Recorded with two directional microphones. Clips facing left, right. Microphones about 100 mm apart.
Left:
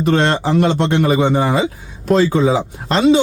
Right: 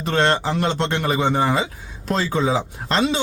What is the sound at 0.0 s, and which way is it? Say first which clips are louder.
A man's voice: left 4 dB; 15° left (ahead or behind).